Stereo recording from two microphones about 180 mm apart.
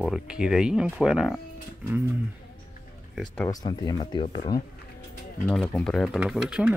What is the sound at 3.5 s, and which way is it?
Speech, 20° left (ahead or behind).